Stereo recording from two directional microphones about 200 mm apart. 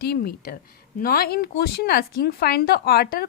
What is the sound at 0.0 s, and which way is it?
A woman's voice, 50° left (ahead or behind).